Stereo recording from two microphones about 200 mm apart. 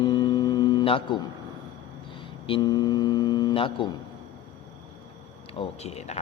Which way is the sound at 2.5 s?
20° left (ahead or behind).